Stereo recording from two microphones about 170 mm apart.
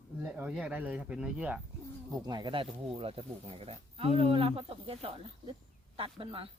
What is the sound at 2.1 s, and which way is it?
Speech, 25° right (ahead or behind).